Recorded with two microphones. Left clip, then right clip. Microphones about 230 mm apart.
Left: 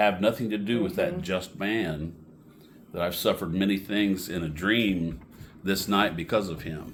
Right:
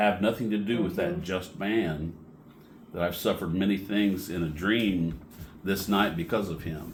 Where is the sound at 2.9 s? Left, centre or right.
Left.